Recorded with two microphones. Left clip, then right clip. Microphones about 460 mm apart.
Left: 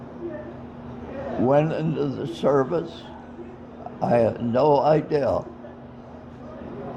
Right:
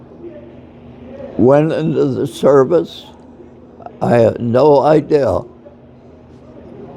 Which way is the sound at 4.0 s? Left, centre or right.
Right.